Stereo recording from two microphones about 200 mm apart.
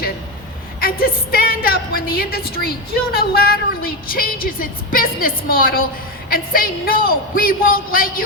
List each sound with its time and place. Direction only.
0.8 s a woman's voice: 45° left (ahead or behind)